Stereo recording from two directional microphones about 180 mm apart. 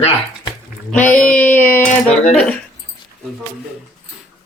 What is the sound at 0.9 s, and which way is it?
Speech, 10° left (ahead or behind).